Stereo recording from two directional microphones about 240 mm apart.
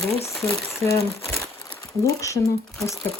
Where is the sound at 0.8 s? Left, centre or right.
Centre.